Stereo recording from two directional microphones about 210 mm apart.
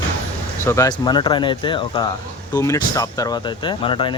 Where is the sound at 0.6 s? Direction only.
15° left (ahead or behind).